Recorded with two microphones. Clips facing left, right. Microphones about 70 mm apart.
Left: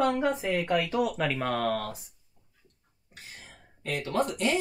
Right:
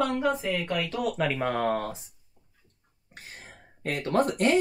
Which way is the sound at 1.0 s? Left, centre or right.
Centre.